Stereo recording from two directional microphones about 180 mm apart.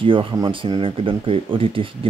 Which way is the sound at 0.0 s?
30° right (ahead or behind).